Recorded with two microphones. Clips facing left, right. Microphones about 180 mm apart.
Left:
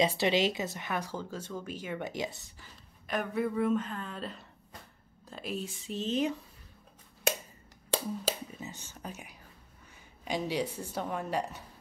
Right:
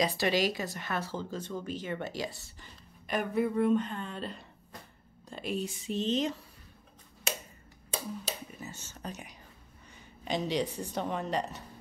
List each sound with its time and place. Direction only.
0.0 s a woman's voice: 25° left (ahead or behind)
2.6 s speech: centre (ahead or behind)
8.5 s a woman's voice: 15° left (ahead or behind)